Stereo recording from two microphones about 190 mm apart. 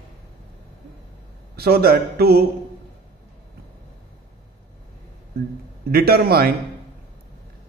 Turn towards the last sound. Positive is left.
turn(degrees=-55)  # may be behind; listen again after turning